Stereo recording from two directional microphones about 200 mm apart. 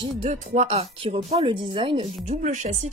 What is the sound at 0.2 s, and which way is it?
Speech, 35° right (ahead or behind).